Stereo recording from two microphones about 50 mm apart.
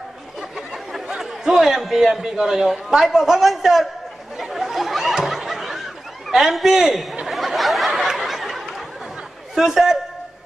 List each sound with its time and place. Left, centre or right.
0.4 s a man's voice: centre
4.4 s snicker: centre
6.2 s a man's voice: centre
7.2 s snicker: centre
8.2 s a sound: centre
9.6 s a man's voice: centre